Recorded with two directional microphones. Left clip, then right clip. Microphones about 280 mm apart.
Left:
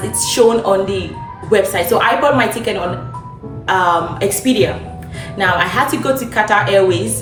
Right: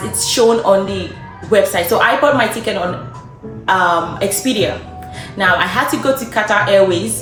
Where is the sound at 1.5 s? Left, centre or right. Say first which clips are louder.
Right 1 dB; centre.